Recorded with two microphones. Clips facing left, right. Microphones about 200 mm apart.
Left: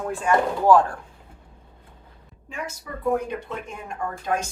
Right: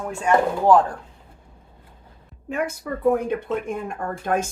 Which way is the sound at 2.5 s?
55° right (ahead or behind).